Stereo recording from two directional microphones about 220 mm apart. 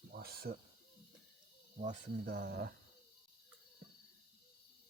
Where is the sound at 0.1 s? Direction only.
45° right (ahead or behind).